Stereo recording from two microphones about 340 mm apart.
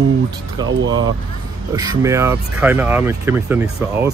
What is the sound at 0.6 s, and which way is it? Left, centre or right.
Speech, centre.